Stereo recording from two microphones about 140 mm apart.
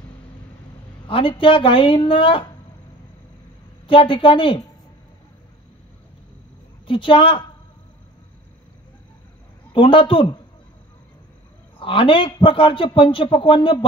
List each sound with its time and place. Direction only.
1.0 s a man's voice: 40° left (ahead or behind)
3.8 s a man's voice: 40° left (ahead or behind)
6.9 s a man's voice: 40° left (ahead or behind)
9.7 s a man's voice: 40° left (ahead or behind)
11.8 s a man's voice: 40° left (ahead or behind)